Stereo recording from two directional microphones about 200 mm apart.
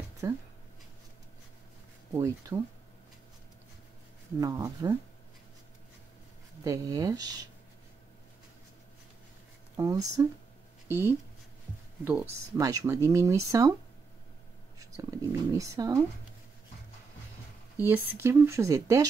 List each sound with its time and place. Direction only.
0.2 s speech: 15° right (ahead or behind)
2.1 s speech: 15° right (ahead or behind)
4.4 s speech: 15° right (ahead or behind)
6.6 s speech: 15° right (ahead or behind)
9.8 s speech: 15° right (ahead or behind)
14.8 s speech: 15° right (ahead or behind)
17.7 s speech: 10° right (ahead or behind)